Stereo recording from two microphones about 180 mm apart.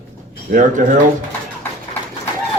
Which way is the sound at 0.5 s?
45° right (ahead or behind).